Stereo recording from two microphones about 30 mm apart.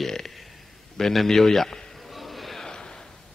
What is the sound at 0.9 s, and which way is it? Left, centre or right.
Speech, centre.